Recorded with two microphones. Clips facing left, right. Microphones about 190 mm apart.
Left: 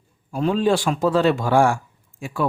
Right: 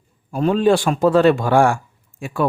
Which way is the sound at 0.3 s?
50° right (ahead or behind).